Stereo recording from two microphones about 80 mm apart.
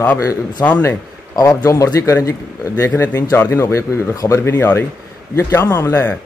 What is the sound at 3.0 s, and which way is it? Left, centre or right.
Speech, left.